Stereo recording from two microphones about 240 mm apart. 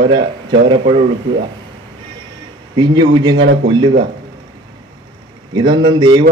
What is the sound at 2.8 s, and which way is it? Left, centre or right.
Speech, centre.